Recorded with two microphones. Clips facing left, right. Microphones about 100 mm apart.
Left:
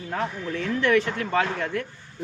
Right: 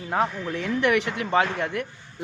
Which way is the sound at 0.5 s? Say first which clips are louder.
Left 2 dB; 15° right (ahead or behind).